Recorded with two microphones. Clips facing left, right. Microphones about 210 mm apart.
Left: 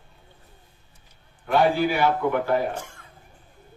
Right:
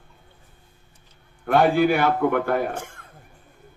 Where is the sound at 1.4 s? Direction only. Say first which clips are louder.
Right 3 dB; 50° right (ahead or behind).